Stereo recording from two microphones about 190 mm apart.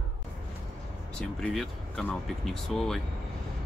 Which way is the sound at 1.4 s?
5° left (ahead or behind).